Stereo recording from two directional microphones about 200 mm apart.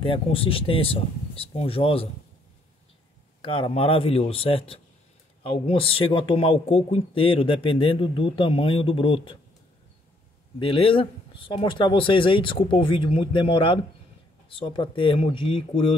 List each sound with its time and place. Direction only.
0.0 s speech: 25° left (ahead or behind)
3.4 s speech: 25° left (ahead or behind)
10.6 s speech: 25° left (ahead or behind)